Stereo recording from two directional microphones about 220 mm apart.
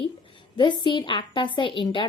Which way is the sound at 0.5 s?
20° left (ahead or behind).